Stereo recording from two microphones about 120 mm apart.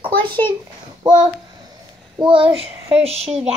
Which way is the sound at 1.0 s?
40° right (ahead or behind).